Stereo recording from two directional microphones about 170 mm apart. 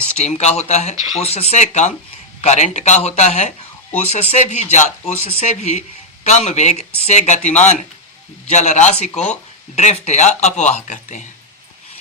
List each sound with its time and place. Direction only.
0.2 s speech: 40° left (ahead or behind)